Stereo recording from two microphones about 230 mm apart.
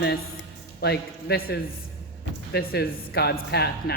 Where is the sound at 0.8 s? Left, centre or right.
Left.